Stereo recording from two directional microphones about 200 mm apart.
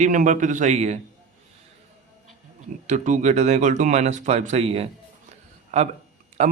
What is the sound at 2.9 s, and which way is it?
Speech, 40° right (ahead or behind).